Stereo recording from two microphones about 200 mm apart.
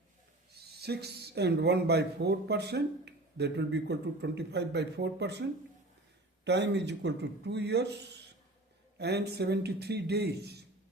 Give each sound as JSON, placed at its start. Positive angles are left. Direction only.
{"t": 0.6, "sound": "speech", "side_deg": -55}
{"t": 9.0, "sound": "speech", "side_deg": -55}